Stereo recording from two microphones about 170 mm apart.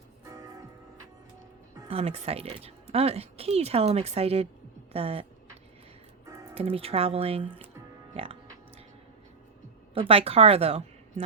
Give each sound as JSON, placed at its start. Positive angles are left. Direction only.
{"t": 0.3, "sound": "music", "side_deg": -20}
{"t": 1.9, "sound": "speech", "side_deg": -35}
{"t": 6.5, "sound": "speech", "side_deg": -35}
{"t": 9.9, "sound": "speech", "side_deg": -35}